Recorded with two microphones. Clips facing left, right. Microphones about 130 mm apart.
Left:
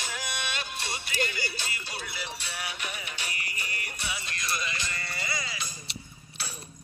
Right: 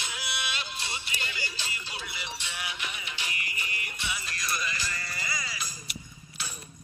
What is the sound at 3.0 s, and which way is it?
Music, 35° left (ahead or behind).